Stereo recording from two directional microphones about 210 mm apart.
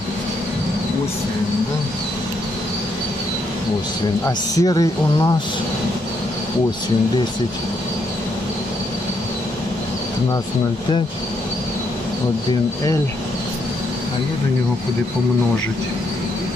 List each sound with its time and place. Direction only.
4.3 s speech: 20° left (ahead or behind)